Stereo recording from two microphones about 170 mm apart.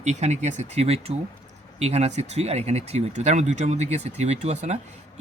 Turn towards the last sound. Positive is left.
turn(degrees=-40)  # may be behind; listen again after turning